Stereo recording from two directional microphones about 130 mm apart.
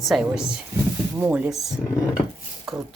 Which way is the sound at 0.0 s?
Centre (ahead or behind).